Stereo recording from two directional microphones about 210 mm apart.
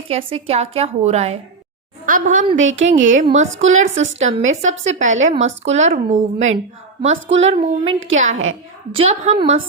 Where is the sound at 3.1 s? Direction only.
35° right (ahead or behind).